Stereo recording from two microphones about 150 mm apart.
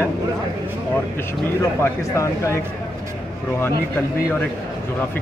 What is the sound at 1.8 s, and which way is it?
Speech, 20° left (ahead or behind).